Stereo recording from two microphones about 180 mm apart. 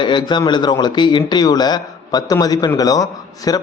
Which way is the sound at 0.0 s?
25° left (ahead or behind).